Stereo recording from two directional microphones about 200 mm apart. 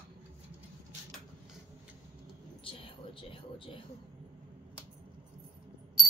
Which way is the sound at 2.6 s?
25° left (ahead or behind).